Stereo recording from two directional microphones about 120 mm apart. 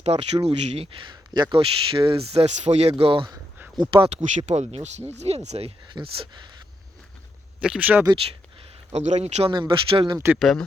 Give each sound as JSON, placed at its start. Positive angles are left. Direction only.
{"t": 0.0, "sound": "speech", "side_deg": -65}
{"t": 1.0, "sound": "speech", "side_deg": -35}
{"t": 3.0, "sound": "speech", "side_deg": -50}
{"t": 4.2, "sound": "speech", "side_deg": -80}
{"t": 5.9, "sound": "speech", "side_deg": -45}
{"t": 7.6, "sound": "speech", "side_deg": -10}
{"t": 8.9, "sound": "speech", "side_deg": -70}
{"t": 9.5, "sound": "speech", "side_deg": -40}